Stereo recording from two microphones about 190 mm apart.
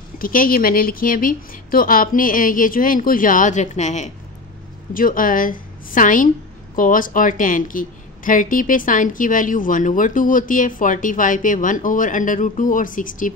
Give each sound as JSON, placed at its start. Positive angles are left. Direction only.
{"t": 0.2, "sound": "a woman's voice", "side_deg": 45}